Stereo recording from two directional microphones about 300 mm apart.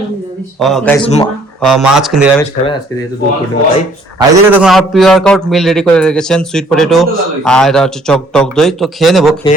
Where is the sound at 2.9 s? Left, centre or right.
Centre.